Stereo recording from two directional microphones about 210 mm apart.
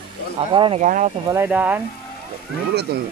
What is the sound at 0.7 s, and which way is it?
Speech, 35° right (ahead or behind).